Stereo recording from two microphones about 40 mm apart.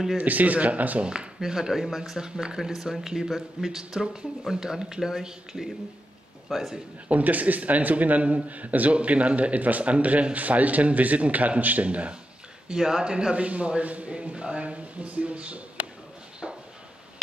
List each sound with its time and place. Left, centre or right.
0.2 s a man's voice: right
1.0 s speech: right
1.4 s a man's voice: centre
7.1 s a man's voice: right
12.6 s a man's voice: centre; by 15.6 s right